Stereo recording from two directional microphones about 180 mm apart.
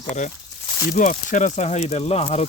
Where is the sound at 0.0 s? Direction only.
40° left (ahead or behind).